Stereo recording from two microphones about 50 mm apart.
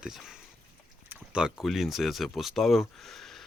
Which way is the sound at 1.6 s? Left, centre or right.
Centre.